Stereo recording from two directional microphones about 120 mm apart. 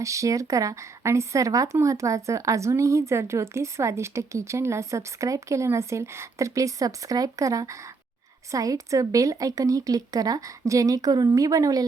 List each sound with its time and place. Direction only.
0.0 s speech: 25° right (ahead or behind)